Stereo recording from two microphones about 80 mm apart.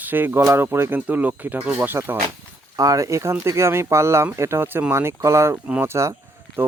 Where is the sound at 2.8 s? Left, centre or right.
Right.